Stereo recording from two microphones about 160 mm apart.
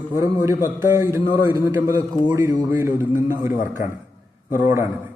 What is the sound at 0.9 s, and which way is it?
A man's voice, 15° right (ahead or behind).